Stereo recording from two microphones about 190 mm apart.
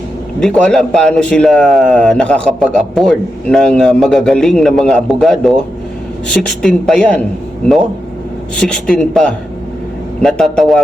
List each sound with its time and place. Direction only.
0.3 s a man's voice: 5° left (ahead or behind)
8.5 s a man's voice: 5° left (ahead or behind)